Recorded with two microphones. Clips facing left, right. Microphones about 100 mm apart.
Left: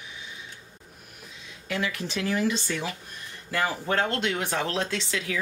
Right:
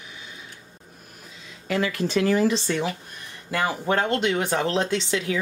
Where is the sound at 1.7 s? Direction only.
45° right (ahead or behind).